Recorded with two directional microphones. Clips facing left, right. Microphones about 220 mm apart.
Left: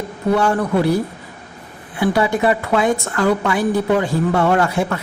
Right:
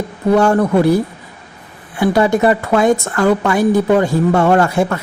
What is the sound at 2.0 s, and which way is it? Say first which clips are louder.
Speech: right 4 dB; 45° right (ahead or behind).